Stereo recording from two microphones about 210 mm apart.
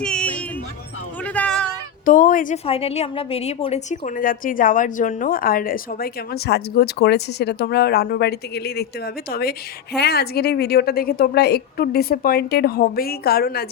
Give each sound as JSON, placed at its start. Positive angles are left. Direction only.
{"t": 0.0, "sound": "music", "side_deg": 5}
{"t": 1.2, "sound": "a sound", "side_deg": 5}
{"t": 2.0, "sound": "a woman's voice", "side_deg": 40}